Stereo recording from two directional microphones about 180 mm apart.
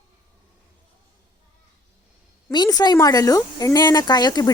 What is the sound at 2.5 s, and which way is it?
Speech, 20° left (ahead or behind).